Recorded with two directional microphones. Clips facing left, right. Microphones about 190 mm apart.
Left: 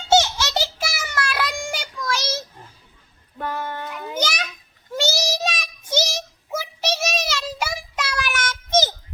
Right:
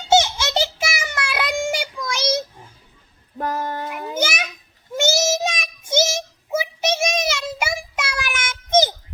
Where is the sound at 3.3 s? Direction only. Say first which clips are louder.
Right 3 dB; 40° right (ahead or behind).